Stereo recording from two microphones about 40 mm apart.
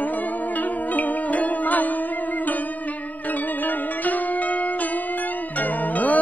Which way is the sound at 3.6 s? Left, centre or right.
Left.